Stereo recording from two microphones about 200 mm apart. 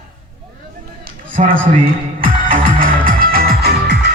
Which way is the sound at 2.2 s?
45° right (ahead or behind).